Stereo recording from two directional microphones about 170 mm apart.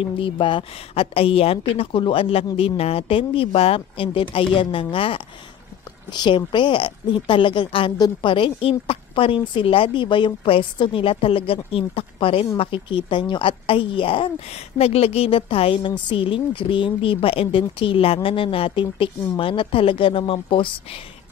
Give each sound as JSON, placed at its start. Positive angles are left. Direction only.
{"t": 0.0, "sound": "a woman's voice", "side_deg": 30}